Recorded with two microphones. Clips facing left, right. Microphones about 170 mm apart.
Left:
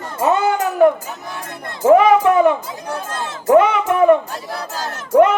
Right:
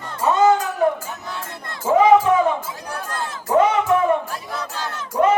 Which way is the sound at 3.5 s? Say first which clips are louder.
Left 4 dB; 70° left (ahead or behind).